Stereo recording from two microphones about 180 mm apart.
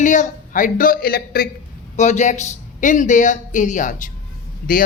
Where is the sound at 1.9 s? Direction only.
40° left (ahead or behind).